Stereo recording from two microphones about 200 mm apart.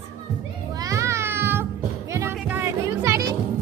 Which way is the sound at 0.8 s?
15° right (ahead or behind).